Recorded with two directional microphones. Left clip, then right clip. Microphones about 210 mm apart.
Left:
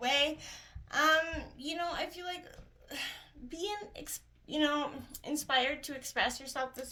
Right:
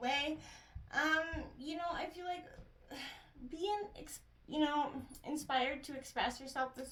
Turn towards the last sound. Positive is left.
turn(degrees=35)  # may be behind; listen again after turning